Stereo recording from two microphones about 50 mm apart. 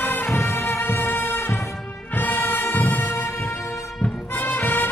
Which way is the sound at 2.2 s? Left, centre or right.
Left.